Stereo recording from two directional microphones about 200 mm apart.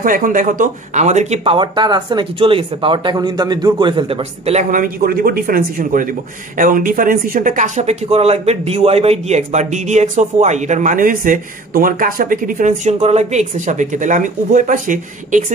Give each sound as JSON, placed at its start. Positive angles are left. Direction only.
{"t": 0.0, "sound": "speech", "side_deg": -45}